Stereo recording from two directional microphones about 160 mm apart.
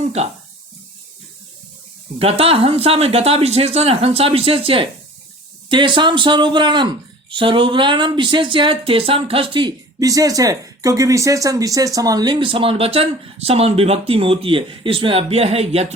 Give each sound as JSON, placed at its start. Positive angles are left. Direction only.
{"t": 0.0, "sound": "speech", "side_deg": -45}
{"t": 2.1, "sound": "speech", "side_deg": -35}